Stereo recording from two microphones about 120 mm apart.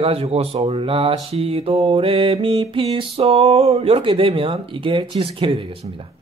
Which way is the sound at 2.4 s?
45° right (ahead or behind).